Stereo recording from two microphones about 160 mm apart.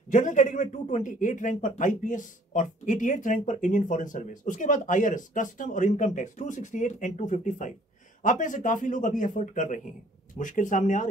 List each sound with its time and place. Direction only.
0.1 s a man's voice: 50° left (ahead or behind)